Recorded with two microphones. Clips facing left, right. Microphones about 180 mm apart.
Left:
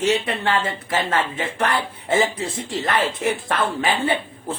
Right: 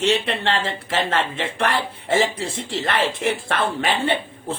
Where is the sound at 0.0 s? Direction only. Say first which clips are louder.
Even; 30° right (ahead or behind).